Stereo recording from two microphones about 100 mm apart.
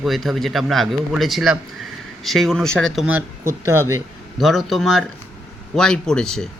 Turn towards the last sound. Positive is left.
turn(degrees=5)  # may be behind; listen again after turning